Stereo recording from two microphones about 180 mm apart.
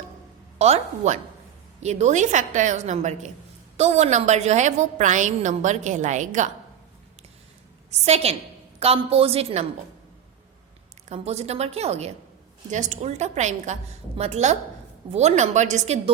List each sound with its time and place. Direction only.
0.6 s a woman's voice: 40° right (ahead or behind)
7.9 s a woman's voice: 35° right (ahead or behind)
11.1 s a woman's voice: 35° right (ahead or behind)